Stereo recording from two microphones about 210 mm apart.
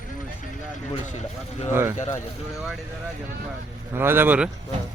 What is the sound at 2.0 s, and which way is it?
Speech, 35° left (ahead or behind).